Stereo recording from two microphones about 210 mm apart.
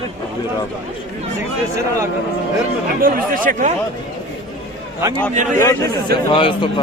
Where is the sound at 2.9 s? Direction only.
45° right (ahead or behind).